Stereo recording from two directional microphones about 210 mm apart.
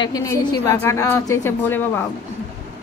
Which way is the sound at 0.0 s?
20° left (ahead or behind).